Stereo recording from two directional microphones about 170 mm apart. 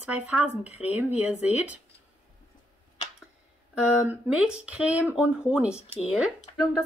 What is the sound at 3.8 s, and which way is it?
Speech, 5° right (ahead or behind).